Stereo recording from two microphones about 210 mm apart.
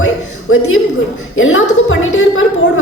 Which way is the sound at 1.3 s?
70° left (ahead or behind).